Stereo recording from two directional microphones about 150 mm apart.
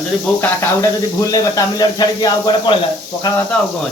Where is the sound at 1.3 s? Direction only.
25° left (ahead or behind).